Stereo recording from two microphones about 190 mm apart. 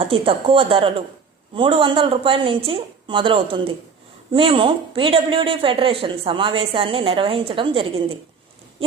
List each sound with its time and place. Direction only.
0.0 s speech: 30° right (ahead or behind)